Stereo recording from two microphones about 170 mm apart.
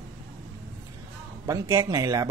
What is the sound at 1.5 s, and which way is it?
Speech, 20° right (ahead or behind).